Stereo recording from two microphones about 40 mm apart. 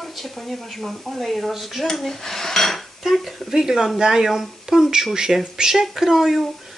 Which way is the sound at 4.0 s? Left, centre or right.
Centre.